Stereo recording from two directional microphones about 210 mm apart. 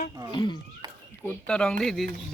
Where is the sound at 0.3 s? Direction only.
20° left (ahead or behind).